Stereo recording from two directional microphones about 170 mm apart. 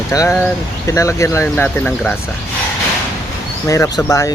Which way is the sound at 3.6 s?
20° left (ahead or behind).